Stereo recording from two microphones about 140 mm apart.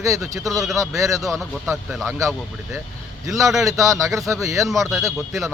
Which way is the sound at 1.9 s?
Centre (ahead or behind).